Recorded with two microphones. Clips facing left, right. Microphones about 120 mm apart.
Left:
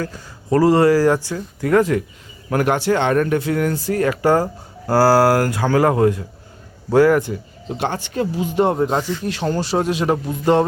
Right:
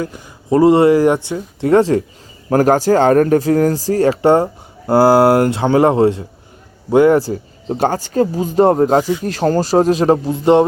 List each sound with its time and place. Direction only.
0.0 s speech: 20° right (ahead or behind)
7.2 s speech: 35° right (ahead or behind)